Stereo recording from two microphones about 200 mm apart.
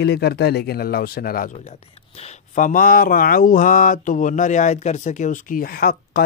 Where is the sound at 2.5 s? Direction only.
40° left (ahead or behind).